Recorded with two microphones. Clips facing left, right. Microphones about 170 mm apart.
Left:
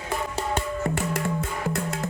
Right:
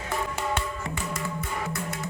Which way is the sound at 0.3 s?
40° left (ahead or behind).